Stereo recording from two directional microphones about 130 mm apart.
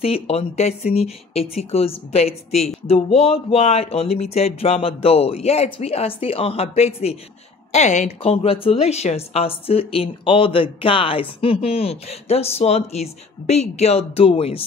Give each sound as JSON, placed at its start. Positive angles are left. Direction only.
{"t": 0.0, "sound": "a woman's voice", "side_deg": 50}
{"t": 7.7, "sound": "a woman's voice", "side_deg": 65}